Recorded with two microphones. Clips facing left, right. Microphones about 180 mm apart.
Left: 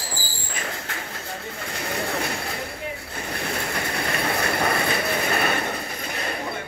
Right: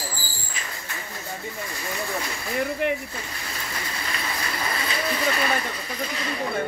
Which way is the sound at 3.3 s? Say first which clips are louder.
Left 7 dB; 65° left (ahead or behind).